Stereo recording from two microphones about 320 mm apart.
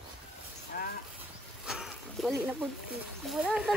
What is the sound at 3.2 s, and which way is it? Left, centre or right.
Speech, centre.